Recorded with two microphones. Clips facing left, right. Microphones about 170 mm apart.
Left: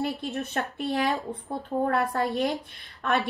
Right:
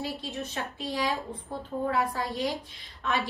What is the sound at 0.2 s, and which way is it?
A woman's voice, 65° left (ahead or behind).